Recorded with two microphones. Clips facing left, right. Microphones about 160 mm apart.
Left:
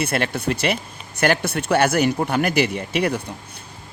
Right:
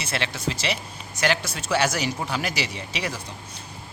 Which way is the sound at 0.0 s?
55° left (ahead or behind).